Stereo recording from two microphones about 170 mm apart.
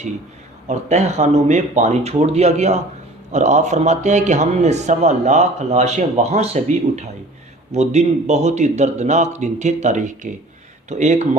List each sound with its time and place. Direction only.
0.7 s a man's voice: 40° right (ahead or behind)